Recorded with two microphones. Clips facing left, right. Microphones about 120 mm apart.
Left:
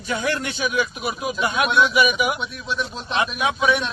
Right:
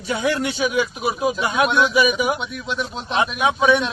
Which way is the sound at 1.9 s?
30° right (ahead or behind).